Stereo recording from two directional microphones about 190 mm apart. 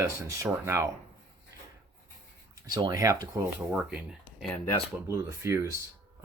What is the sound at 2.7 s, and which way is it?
Speech, 20° right (ahead or behind).